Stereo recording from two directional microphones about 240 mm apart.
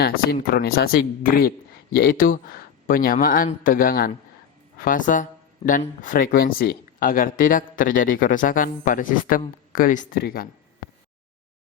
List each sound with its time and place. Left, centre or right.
0.0 s speech: left